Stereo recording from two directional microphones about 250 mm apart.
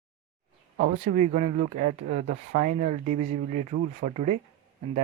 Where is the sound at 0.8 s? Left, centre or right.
Right.